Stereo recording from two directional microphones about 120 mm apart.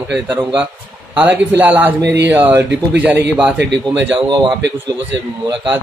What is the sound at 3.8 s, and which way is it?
Speech, 40° right (ahead or behind).